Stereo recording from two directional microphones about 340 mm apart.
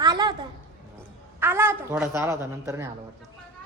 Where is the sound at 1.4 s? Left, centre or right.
Centre.